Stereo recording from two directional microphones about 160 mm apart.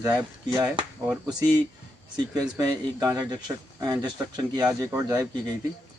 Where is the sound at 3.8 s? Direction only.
25° right (ahead or behind).